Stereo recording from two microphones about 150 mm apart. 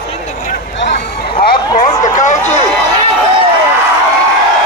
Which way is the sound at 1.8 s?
55° left (ahead or behind).